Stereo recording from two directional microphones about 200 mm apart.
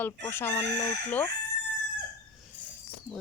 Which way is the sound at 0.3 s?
10° left (ahead or behind).